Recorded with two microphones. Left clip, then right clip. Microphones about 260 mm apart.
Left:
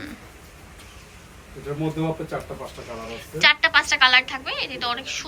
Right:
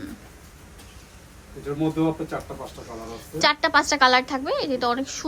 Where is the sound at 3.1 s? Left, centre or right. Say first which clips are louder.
Left 3 dB; right.